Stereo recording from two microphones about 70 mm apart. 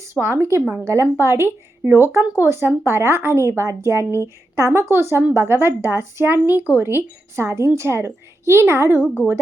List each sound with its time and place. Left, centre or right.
0.0 s a woman's voice: right